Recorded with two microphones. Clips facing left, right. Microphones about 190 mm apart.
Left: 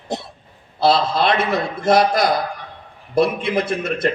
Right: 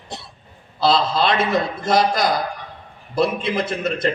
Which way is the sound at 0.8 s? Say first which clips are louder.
Left 1 dB; 55° left (ahead or behind).